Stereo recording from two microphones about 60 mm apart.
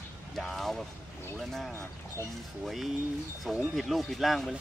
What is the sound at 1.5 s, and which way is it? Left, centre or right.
Speech, centre.